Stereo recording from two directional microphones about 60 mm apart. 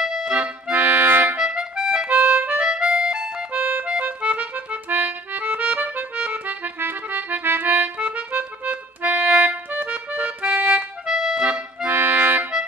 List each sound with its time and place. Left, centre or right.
0.0 s accordion: centre
0.7 s music: right
1.4 s music: centre
2.0 s harmonica: right
2.6 s music: centre
3.5 s music: right
4.0 s accordion: right
6.8 s music: right
7.4 s accordion: right
11.1 s accordion: centre
11.9 s music: right